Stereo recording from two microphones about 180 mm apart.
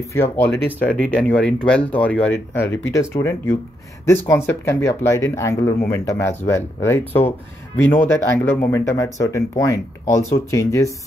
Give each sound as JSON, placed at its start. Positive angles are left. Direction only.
{"t": 0.1, "sound": "speech", "side_deg": 10}